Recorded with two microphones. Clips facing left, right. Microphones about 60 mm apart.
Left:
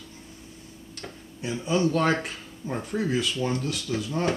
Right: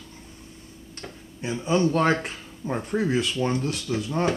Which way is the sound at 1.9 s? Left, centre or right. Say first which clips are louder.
Right 2 dB; centre.